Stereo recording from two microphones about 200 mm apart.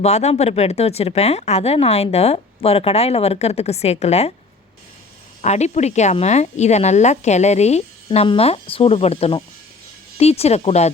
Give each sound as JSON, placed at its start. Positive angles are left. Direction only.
{"t": 0.0, "sound": "speech", "side_deg": 30}
{"t": 5.4, "sound": "speech", "side_deg": 35}